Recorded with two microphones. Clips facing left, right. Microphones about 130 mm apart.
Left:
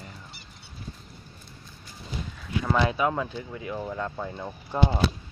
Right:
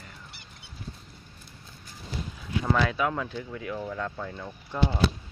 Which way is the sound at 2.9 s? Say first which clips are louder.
Left 2 dB; 15° left (ahead or behind).